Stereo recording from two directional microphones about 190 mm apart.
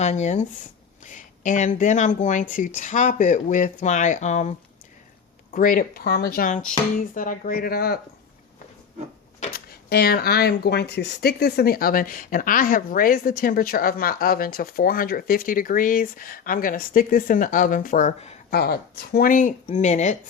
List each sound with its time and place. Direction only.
0.0 s speech: 35° left (ahead or behind)
5.5 s speech: 45° left (ahead or behind)
9.4 s speech: 55° left (ahead or behind)
18.5 s speech: 55° left (ahead or behind); by 20.1 s 40° left (ahead or behind)